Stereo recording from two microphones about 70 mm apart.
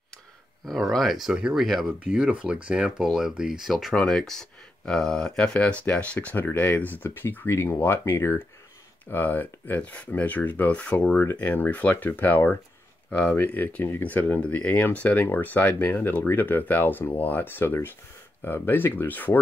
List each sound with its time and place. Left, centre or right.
0.7 s speech: centre
2.0 s speech: centre; by 19.3 s left